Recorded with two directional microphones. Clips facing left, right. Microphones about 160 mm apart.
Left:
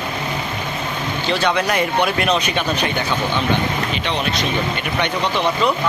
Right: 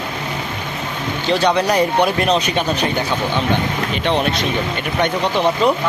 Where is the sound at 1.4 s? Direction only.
35° right (ahead or behind).